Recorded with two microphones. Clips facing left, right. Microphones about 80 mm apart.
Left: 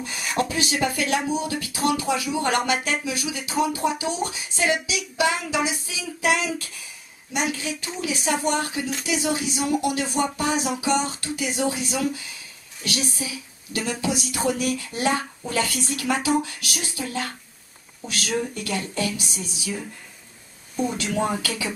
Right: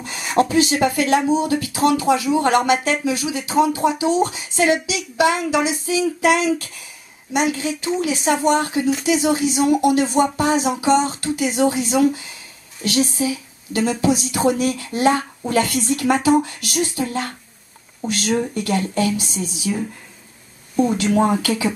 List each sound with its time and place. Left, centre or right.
0.0 s speech: right
7.3 s speech: right
15.0 s speech: right
18.5 s speech: right
20.7 s speech: centre